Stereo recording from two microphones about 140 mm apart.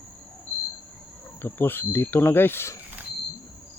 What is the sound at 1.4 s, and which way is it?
Speech, 15° left (ahead or behind).